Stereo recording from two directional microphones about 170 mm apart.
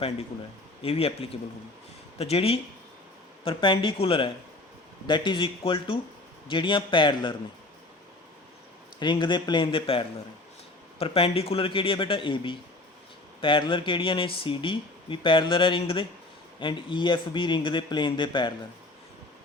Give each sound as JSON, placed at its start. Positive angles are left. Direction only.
{"t": 0.8, "sound": "a man's voice", "side_deg": 35}
{"t": 9.0, "sound": "speech", "side_deg": 30}
{"t": 11.0, "sound": "a man's voice", "side_deg": 35}